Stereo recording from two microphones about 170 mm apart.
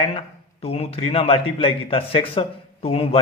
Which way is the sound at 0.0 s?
35° left (ahead or behind).